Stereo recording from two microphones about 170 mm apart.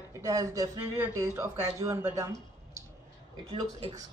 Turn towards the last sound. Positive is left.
turn(degrees=-25)  # may be behind; listen again after turning